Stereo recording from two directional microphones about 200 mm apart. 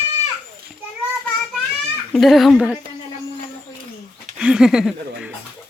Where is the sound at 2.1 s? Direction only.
Centre (ahead or behind).